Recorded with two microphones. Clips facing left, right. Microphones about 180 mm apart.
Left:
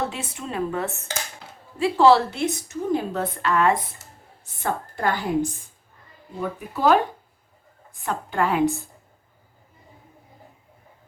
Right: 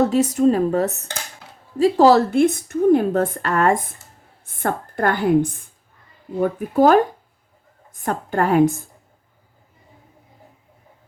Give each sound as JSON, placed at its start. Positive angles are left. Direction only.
{"t": 0.0, "sound": "a woman's voice", "side_deg": -40}